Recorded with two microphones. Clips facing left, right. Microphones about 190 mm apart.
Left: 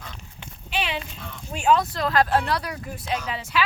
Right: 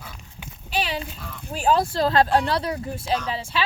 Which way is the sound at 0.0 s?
10° right (ahead or behind).